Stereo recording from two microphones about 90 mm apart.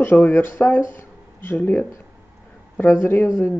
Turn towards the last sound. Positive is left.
turn(degrees=25)  # may be behind; listen again after turning